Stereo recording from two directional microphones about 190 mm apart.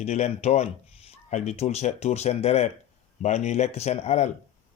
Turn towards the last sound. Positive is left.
turn(degrees=35)  # may be behind; listen again after turning